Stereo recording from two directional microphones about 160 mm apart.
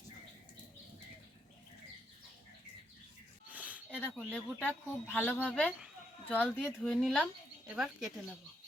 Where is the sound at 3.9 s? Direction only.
5° left (ahead or behind).